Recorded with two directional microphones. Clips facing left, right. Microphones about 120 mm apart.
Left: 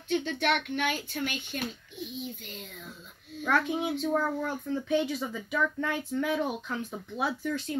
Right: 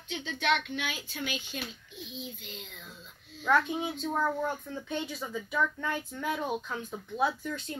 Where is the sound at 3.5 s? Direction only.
70° left (ahead or behind).